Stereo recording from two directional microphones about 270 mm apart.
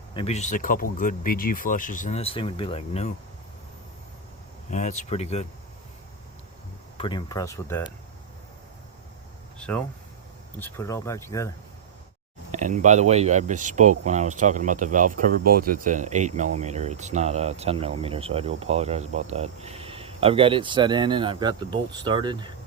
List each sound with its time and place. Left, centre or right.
0.1 s speech: left
4.7 s speech: left
6.9 s speech: centre
9.6 s speech: centre
12.5 s speech: right